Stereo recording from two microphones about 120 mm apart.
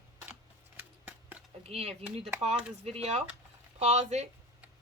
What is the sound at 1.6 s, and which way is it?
Speech, 60° right (ahead or behind).